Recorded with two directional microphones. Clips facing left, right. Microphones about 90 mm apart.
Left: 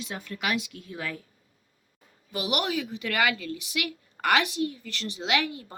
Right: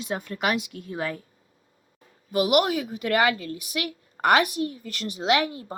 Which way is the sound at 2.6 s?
40° right (ahead or behind).